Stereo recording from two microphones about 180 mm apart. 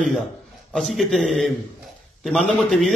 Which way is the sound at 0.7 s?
Centre (ahead or behind).